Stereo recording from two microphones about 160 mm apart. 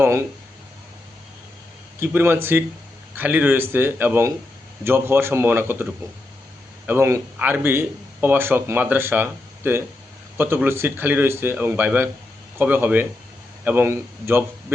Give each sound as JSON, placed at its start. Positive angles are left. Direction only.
{"t": 0.0, "sound": "speech", "side_deg": -15}
{"t": 2.0, "sound": "speech", "side_deg": -15}